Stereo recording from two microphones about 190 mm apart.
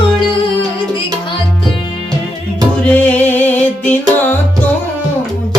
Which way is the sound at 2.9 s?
5° left (ahead or behind).